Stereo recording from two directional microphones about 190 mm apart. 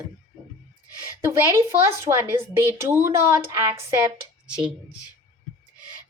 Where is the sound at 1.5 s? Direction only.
15° right (ahead or behind).